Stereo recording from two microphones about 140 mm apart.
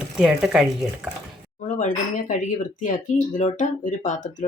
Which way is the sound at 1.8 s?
65° left (ahead or behind).